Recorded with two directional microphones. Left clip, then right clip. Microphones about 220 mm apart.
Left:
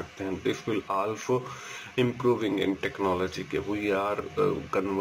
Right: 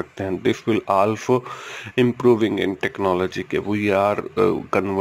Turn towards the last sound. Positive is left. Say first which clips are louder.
# right 8 dB
turn(degrees=-45)  # may be behind; listen again after turning